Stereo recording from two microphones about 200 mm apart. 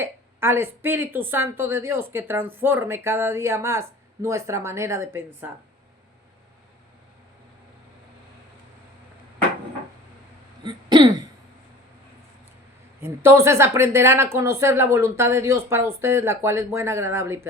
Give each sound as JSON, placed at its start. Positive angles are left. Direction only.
{"t": 0.0, "sound": "a woman's voice", "side_deg": -10}
{"t": 10.6, "sound": "throat clearing", "side_deg": -20}
{"t": 13.2, "sound": "a woman's voice", "side_deg": -15}